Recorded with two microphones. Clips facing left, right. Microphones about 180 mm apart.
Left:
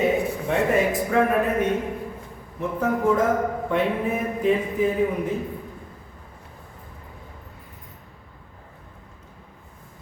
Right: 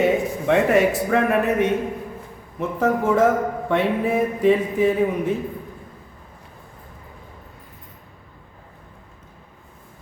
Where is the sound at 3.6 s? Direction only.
75° right (ahead or behind).